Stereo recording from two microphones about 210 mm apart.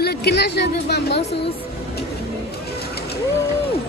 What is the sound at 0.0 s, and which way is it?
A woman's voice, 50° left (ahead or behind).